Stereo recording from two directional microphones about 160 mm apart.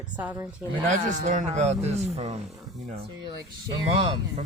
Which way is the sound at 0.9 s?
50° right (ahead or behind).